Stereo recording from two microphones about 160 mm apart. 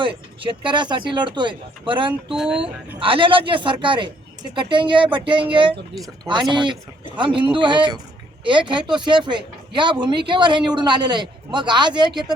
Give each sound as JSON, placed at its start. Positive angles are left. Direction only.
{"t": 0.0, "sound": "speech", "side_deg": -30}
{"t": 2.3, "sound": "speech", "side_deg": 0}
{"t": 3.0, "sound": "speech", "side_deg": -35}